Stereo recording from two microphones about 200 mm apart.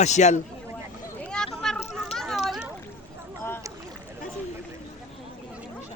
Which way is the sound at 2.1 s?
Centre (ahead or behind).